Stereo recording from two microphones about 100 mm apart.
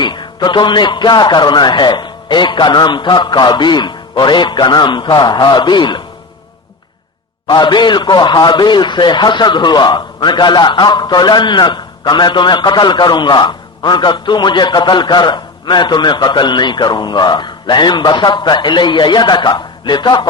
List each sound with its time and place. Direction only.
0.0 s a man's voice: 50° left (ahead or behind)
7.4 s a man's voice: 50° left (ahead or behind)